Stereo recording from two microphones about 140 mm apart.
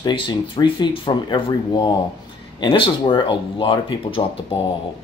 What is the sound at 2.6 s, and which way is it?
Speech, 35° left (ahead or behind).